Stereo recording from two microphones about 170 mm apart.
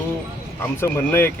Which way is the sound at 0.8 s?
15° left (ahead or behind).